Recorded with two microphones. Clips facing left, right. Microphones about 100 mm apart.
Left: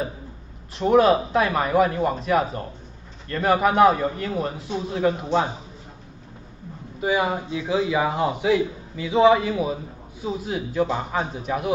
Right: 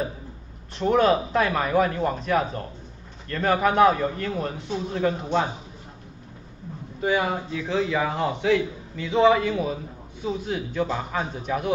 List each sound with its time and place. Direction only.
0.7 s a man's voice: 5° left (ahead or behind)
7.0 s a man's voice: 10° left (ahead or behind)